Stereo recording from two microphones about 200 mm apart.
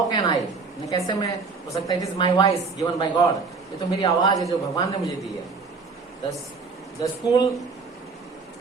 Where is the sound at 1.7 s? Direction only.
20° left (ahead or behind).